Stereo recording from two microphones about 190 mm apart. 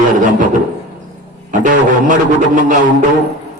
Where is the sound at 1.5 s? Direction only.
40° right (ahead or behind).